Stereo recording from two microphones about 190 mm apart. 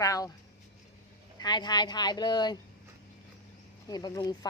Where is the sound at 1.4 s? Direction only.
20° left (ahead or behind).